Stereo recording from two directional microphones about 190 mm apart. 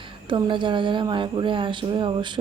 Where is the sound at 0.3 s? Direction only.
25° right (ahead or behind).